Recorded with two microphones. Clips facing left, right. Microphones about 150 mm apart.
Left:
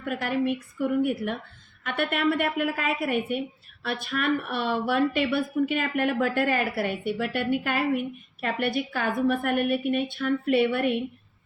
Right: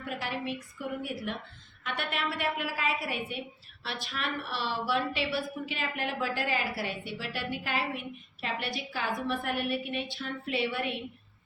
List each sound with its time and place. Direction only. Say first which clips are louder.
0.0 s a woman's voice: left 8 dB; 55° left (ahead or behind)